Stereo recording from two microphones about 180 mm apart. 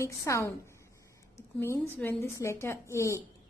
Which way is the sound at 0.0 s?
15° left (ahead or behind).